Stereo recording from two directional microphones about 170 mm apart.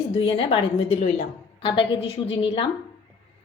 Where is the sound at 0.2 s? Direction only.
35° left (ahead or behind).